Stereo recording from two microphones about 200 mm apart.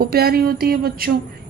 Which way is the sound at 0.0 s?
50° right (ahead or behind).